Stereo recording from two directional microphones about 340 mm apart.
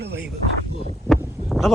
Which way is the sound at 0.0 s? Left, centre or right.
Right.